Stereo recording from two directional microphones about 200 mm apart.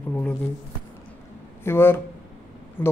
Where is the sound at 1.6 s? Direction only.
10° left (ahead or behind).